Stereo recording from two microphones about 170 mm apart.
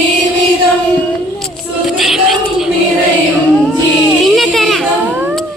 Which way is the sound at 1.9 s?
Centre (ahead or behind).